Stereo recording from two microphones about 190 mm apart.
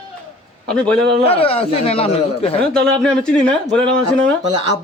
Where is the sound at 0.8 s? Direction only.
5° left (ahead or behind).